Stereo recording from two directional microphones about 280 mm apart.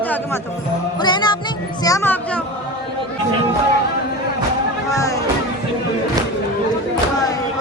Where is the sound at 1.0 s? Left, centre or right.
Centre.